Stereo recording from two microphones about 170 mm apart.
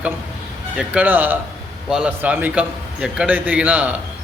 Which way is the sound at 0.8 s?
10° right (ahead or behind).